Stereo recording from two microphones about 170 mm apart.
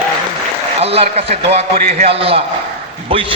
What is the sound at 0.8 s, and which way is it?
A man's voice, 35° right (ahead or behind).